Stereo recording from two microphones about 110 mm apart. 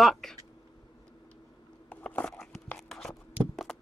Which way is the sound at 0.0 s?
Centre (ahead or behind).